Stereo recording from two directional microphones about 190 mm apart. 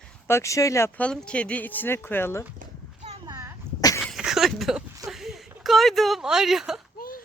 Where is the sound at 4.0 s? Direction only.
Centre (ahead or behind).